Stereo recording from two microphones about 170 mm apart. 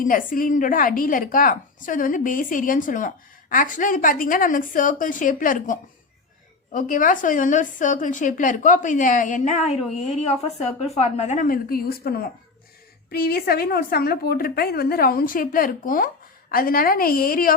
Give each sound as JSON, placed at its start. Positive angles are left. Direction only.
{"t": 0.0, "sound": "a woman's voice", "side_deg": 55}